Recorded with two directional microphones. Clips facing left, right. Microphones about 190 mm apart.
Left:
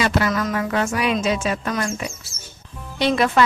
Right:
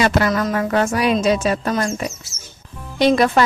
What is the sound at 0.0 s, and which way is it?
A woman's voice, 45° right (ahead or behind).